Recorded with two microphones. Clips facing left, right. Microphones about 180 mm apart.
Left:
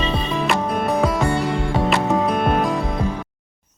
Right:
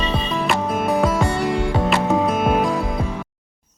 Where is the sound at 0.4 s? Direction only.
Centre (ahead or behind).